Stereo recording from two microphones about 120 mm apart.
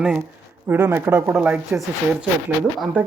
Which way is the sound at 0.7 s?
20° right (ahead or behind).